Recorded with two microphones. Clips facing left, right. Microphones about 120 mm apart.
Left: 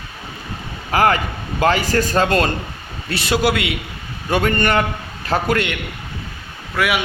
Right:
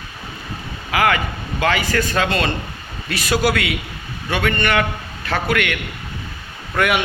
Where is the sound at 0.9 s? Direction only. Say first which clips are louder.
Left 2 dB; 40° left (ahead or behind).